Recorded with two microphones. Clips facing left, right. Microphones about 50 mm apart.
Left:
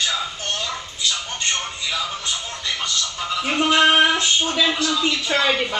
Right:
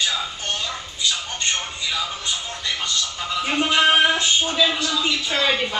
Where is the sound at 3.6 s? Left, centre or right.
Left.